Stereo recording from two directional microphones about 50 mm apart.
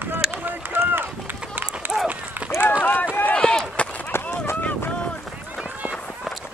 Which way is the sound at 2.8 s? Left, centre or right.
Left.